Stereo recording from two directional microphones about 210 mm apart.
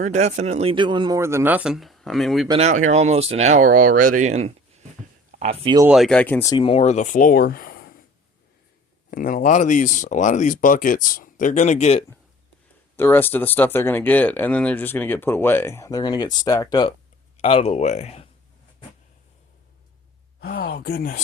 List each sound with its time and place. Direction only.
0.0 s speech: 35° right (ahead or behind); by 2.5 s centre (ahead or behind)
2.5 s speech: 30° right (ahead or behind)
5.8 s speech: centre (ahead or behind); by 7.9 s 45° left (ahead or behind)
9.0 s speech: 40° left (ahead or behind)
13.0 s speech: 10° left (ahead or behind); by 18.3 s 30° left (ahead or behind)
20.4 s speech: 50° left (ahead or behind)